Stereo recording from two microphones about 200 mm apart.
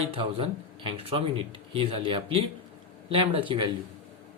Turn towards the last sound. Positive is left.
turn(degrees=-25)  # may be behind; listen again after turning